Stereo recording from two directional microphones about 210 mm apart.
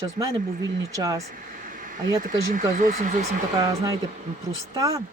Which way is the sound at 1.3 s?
40° right (ahead or behind).